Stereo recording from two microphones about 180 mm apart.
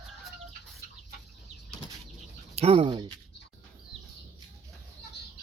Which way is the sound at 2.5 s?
35° right (ahead or behind).